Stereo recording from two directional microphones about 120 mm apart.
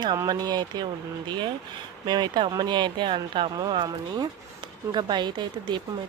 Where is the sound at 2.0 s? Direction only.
40° right (ahead or behind).